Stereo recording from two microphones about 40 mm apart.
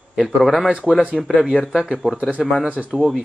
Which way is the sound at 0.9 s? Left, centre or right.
Right.